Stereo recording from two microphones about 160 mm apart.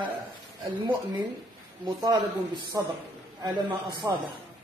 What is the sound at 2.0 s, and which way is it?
A man's voice, 25° right (ahead or behind).